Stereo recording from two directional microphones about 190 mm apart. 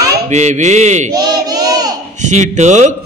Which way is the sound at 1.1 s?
20° right (ahead or behind).